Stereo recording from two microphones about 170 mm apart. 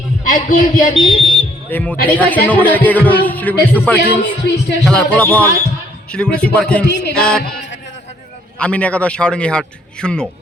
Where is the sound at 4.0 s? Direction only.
75° left (ahead or behind).